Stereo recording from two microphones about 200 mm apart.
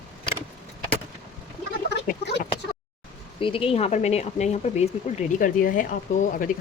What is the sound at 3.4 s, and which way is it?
Speech, 25° left (ahead or behind).